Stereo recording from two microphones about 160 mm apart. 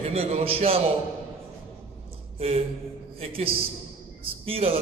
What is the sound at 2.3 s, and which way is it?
A man's voice, 40° right (ahead or behind).